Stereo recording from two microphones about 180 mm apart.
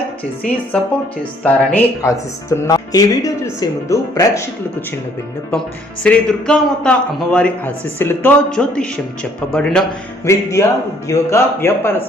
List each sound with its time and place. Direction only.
0.4 s speech: 5° left (ahead or behind)
6.0 s a man's voice: 5° left (ahead or behind)
10.2 s speech: 15° left (ahead or behind)